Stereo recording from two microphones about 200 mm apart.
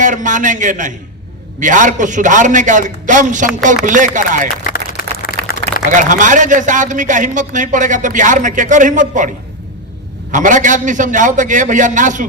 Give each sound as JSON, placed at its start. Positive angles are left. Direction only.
{"t": 0.0, "sound": "a man's voice", "side_deg": -40}
{"t": 5.9, "sound": "a man's voice", "side_deg": -40}
{"t": 10.3, "sound": "a man's voice", "side_deg": -40}